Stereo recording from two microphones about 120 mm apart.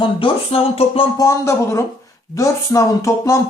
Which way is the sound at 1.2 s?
25° left (ahead or behind).